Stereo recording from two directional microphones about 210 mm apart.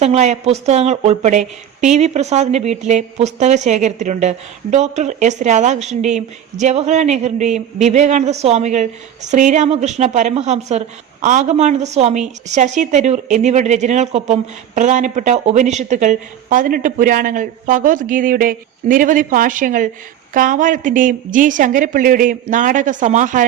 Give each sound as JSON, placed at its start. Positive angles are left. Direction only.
{"t": 0.0, "sound": "a woman's voice", "side_deg": -30}